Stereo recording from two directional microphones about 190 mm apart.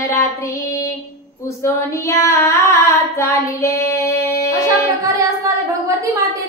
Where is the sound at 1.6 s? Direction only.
15° left (ahead or behind).